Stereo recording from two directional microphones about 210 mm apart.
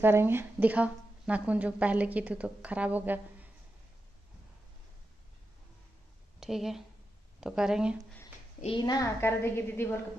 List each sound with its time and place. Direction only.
0.0 s a woman's voice: 10° right (ahead or behind)
6.4 s speech: centre (ahead or behind)
8.5 s a woman's voice: 25° left (ahead or behind)